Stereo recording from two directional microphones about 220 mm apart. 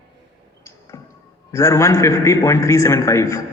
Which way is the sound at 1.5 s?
15° left (ahead or behind).